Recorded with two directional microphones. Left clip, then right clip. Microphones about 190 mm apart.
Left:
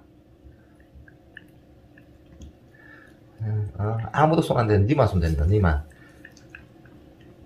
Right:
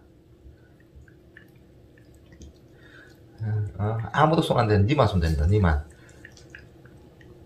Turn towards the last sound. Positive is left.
turn(degrees=20)  # may be behind; listen again after turning